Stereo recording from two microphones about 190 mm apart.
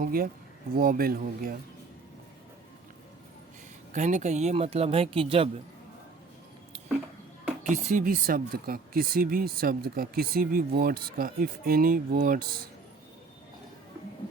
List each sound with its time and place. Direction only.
0.0 s speech: 50° right (ahead or behind)
3.9 s speech: 40° right (ahead or behind)
6.7 s a sound: 35° right (ahead or behind)
7.6 s speech: 40° right (ahead or behind)